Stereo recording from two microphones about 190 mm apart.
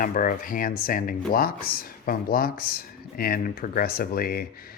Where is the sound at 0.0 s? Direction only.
45° left (ahead or behind).